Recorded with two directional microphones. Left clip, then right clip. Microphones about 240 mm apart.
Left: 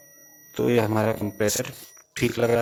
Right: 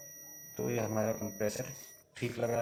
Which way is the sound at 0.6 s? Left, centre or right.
Left.